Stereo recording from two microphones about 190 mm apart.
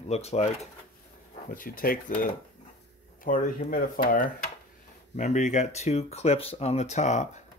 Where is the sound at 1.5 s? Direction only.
50° left (ahead or behind).